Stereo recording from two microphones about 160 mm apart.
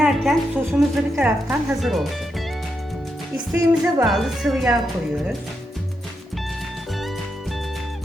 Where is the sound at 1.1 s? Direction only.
10° right (ahead or behind).